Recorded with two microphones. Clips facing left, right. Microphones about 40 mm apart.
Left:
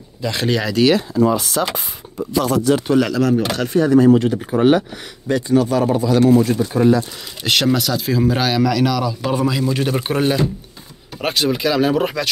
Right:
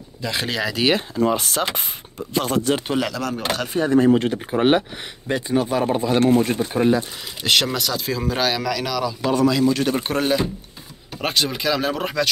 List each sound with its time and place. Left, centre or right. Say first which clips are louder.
0.2 s speech: left 4 dB; centre
0.8 s speech: left 4 dB; right
3.0 s speech: left 8 dB; centre
3.5 s speech: left 6 dB; centre
3.8 s speech: left 4 dB; right
7.4 s a man's voice: left 3 dB; centre